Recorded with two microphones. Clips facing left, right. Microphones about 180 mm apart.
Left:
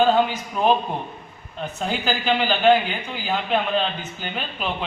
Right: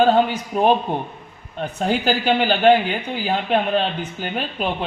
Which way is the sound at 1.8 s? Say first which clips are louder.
Right 5 dB; 45° right (ahead or behind).